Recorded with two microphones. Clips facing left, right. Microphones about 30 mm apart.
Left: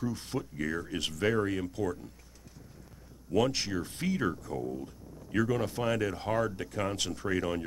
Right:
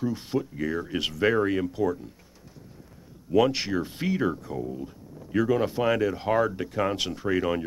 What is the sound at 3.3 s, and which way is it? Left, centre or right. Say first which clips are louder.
Speech: right 6 dB; right.